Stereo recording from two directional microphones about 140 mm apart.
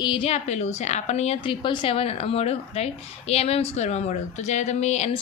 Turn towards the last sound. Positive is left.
turn(degrees=55)  # may be behind; listen again after turning